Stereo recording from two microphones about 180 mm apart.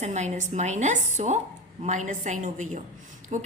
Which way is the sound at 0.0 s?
40° right (ahead or behind).